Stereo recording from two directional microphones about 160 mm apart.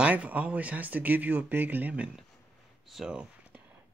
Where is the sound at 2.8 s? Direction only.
5° right (ahead or behind).